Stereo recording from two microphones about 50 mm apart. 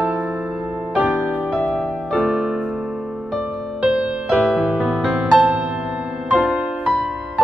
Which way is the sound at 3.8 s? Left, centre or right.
Centre.